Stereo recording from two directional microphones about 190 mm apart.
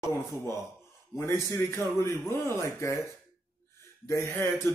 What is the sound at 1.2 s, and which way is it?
Speech, 15° left (ahead or behind).